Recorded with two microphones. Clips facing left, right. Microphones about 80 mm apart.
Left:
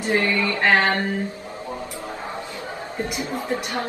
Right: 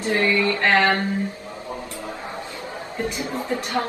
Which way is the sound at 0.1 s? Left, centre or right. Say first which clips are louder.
Right 1 dB; left.